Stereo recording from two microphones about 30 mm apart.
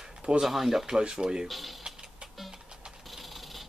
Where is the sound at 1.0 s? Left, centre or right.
Right.